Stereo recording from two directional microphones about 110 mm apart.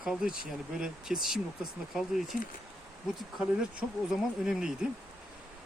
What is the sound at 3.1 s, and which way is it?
Speech, 5° right (ahead or behind).